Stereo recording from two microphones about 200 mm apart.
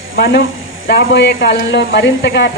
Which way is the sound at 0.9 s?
55° left (ahead or behind).